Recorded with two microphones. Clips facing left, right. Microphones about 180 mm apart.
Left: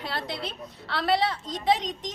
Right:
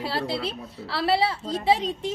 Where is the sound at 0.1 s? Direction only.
30° right (ahead or behind).